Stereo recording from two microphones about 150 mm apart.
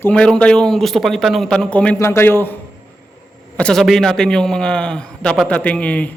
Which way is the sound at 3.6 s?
5° left (ahead or behind).